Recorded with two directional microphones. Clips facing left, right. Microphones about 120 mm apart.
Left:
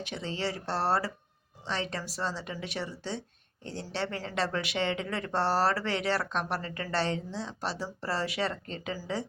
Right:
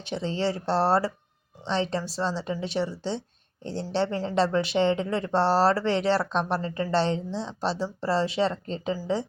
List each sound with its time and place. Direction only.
0.0 s speech: 30° right (ahead or behind)